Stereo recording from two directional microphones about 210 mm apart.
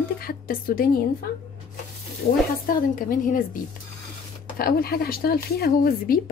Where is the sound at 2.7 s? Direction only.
40° left (ahead or behind).